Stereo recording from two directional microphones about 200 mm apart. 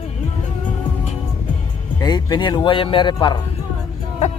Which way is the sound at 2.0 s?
20° left (ahead or behind).